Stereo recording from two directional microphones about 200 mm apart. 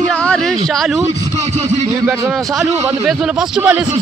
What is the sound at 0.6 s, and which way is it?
Speech, centre (ahead or behind).